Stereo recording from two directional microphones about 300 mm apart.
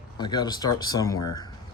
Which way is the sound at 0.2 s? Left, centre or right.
Centre.